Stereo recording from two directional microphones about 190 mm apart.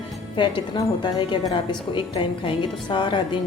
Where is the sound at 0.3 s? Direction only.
25° left (ahead or behind).